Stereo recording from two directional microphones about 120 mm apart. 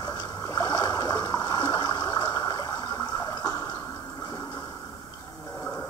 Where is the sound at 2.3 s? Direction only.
30° left (ahead or behind).